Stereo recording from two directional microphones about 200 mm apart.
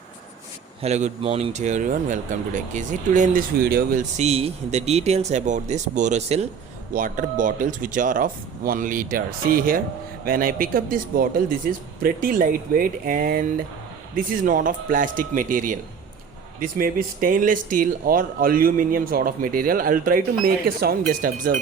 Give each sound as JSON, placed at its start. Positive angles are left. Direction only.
{"t": 0.8, "sound": "speech", "side_deg": -35}